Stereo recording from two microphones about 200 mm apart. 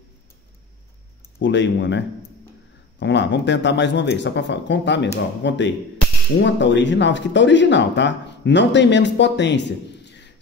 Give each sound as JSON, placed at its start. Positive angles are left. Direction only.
{"t": 1.4, "sound": "speech", "side_deg": 65}